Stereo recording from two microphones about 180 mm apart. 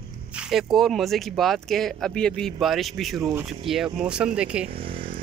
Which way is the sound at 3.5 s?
Centre (ahead or behind).